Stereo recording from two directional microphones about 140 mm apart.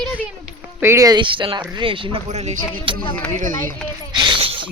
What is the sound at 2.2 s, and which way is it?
Speech, 55° right (ahead or behind).